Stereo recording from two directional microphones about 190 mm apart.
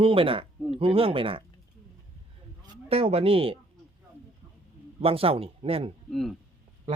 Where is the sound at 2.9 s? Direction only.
30° right (ahead or behind).